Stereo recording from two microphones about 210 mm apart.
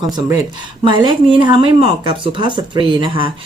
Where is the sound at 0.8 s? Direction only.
20° right (ahead or behind).